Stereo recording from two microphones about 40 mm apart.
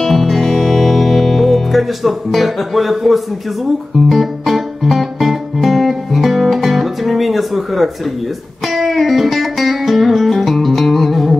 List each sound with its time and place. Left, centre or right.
0.0 s music: centre